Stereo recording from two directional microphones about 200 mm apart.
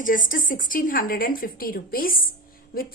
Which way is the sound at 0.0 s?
45° left (ahead or behind).